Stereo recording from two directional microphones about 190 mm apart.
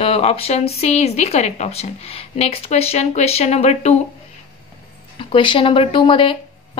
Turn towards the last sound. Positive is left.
turn(degrees=25)  # may be behind; listen again after turning